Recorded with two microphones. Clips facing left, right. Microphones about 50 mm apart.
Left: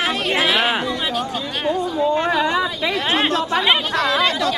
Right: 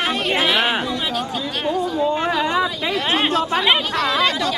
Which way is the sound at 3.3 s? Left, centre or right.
Right.